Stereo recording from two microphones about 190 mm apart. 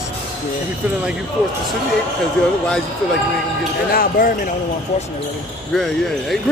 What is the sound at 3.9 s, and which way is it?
Speech, 50° left (ahead or behind).